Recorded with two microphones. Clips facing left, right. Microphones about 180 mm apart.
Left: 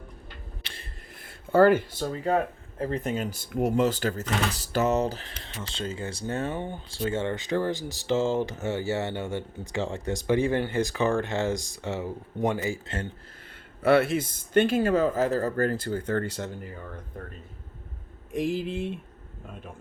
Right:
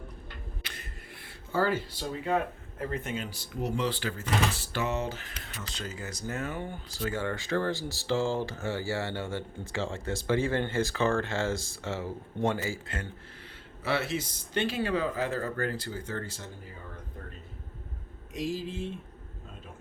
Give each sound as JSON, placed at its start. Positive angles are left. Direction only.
{"t": 0.6, "sound": "a sound", "side_deg": 30}
{"t": 1.5, "sound": "speech", "side_deg": 60}
{"t": 13.8, "sound": "speech", "side_deg": 55}
{"t": 18.3, "sound": "speech", "side_deg": 60}